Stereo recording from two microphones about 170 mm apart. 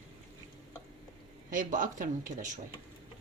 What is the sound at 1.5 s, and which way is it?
Speech, 50° right (ahead or behind).